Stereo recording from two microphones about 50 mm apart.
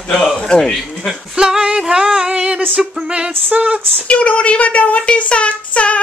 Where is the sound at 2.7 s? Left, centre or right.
Centre.